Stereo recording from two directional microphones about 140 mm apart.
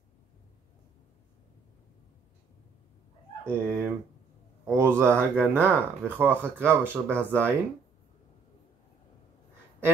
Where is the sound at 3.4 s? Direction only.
15° right (ahead or behind).